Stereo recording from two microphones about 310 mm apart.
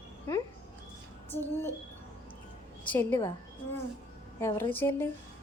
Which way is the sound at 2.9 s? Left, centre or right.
Centre.